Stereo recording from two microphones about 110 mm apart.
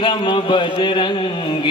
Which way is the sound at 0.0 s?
50° left (ahead or behind).